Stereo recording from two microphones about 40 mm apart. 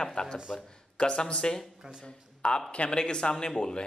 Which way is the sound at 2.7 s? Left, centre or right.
Left.